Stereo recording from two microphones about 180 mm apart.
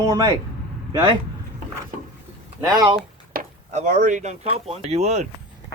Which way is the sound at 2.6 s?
20° right (ahead or behind).